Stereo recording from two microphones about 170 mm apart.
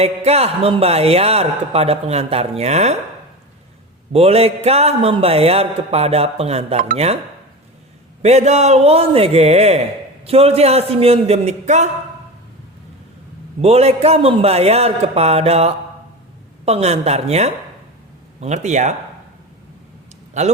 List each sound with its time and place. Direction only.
0.0 s a man's voice: 35° right (ahead or behind)
4.1 s a man's voice: 35° right (ahead or behind)
8.2 s a man's voice: 40° right (ahead or behind)
13.6 s a man's voice: 35° right (ahead or behind)
20.4 s a man's voice: 40° right (ahead or behind)